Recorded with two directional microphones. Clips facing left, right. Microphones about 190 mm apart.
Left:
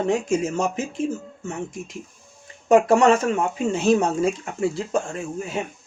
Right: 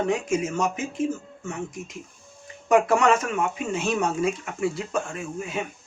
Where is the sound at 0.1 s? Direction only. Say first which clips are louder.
Left 3 dB; 30° left (ahead or behind).